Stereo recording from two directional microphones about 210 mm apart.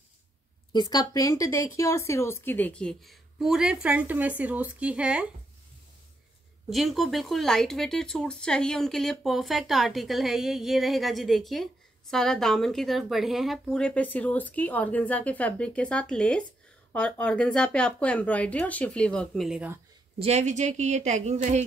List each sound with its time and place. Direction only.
0.7 s speech: 20° left (ahead or behind); by 5.3 s 5° right (ahead or behind)
6.7 s speech: centre (ahead or behind)
20.2 s a woman's voice: 30° right (ahead or behind)